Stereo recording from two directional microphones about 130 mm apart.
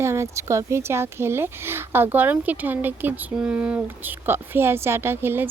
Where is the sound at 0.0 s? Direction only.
20° right (ahead or behind).